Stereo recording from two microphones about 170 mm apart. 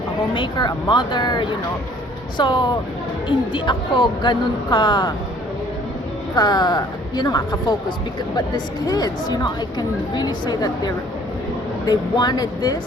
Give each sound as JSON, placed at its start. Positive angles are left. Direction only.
{"t": 0.2, "sound": "a woman's voice", "side_deg": 25}
{"t": 6.3, "sound": "a woman's voice", "side_deg": 25}